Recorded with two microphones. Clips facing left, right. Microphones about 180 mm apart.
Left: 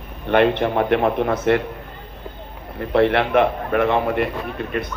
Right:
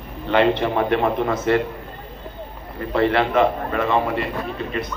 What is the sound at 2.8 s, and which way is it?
A man's voice, 65° left (ahead or behind).